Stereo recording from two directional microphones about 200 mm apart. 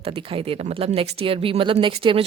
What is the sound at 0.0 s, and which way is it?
Speech, 30° right (ahead or behind).